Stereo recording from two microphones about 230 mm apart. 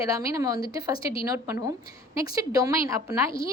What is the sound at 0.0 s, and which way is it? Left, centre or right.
A woman's voice, centre.